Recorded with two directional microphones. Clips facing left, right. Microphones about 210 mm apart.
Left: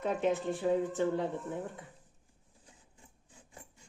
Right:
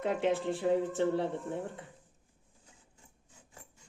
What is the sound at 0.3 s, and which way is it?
Speech, 30° right (ahead or behind).